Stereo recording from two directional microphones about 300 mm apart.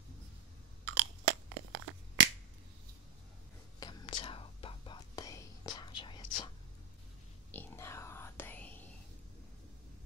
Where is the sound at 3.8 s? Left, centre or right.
Centre.